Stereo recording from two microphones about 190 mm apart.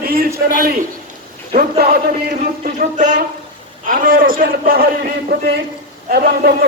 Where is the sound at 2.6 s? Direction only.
40° right (ahead or behind).